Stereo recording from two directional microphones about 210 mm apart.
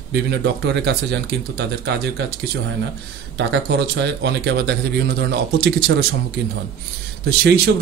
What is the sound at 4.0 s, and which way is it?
Speech, 55° right (ahead or behind).